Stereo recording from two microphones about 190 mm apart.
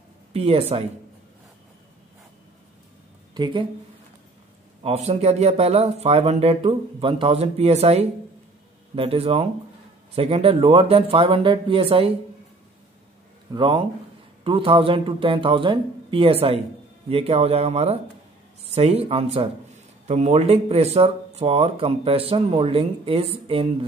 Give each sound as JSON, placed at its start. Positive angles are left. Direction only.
{"t": 0.3, "sound": "speech", "side_deg": -30}
{"t": 3.3, "sound": "speech", "side_deg": -25}
{"t": 4.8, "sound": "speech", "side_deg": -35}
{"t": 13.5, "sound": "speech", "side_deg": -25}